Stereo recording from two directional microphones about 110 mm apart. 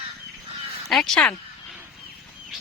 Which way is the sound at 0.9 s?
5° left (ahead or behind).